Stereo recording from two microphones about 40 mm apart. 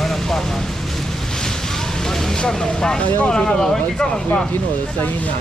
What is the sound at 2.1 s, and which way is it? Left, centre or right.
Speech, centre.